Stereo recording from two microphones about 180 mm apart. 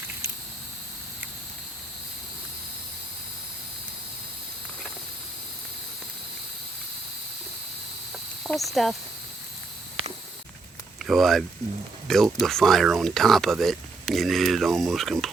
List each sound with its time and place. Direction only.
8.4 s speech: centre (ahead or behind)
11.0 s speech: centre (ahead or behind)